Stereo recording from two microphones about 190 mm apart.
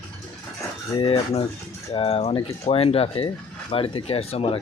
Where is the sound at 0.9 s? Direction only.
30° left (ahead or behind).